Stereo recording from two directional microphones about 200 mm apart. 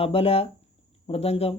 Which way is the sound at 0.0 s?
30° left (ahead or behind).